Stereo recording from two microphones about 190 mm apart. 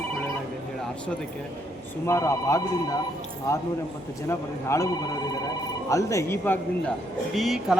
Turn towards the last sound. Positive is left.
turn(degrees=0)  # may be behind; listen again after turning